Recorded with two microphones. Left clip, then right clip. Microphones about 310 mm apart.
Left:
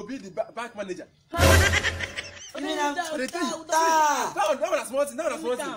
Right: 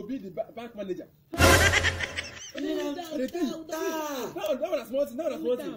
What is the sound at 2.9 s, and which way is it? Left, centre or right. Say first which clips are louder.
Speech: left 4 dB; centre.